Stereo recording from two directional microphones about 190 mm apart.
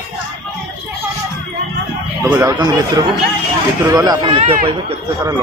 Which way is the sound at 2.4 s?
20° right (ahead or behind).